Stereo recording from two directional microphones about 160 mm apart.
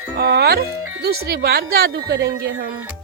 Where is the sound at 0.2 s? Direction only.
85° right.